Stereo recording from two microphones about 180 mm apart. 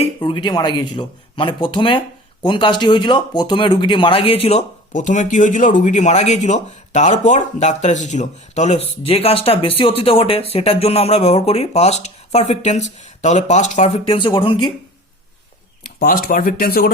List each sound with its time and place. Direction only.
0.0 s speech: 30° left (ahead or behind)
16.0 s speech: 50° left (ahead or behind)